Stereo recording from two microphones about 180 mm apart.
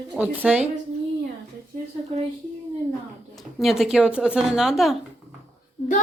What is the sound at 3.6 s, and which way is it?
Speech, centre (ahead or behind).